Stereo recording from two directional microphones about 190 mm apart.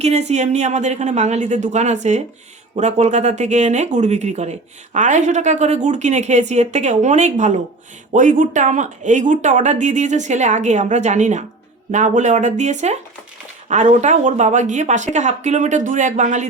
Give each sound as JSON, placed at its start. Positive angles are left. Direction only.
{"t": 0.0, "sound": "speech", "side_deg": -35}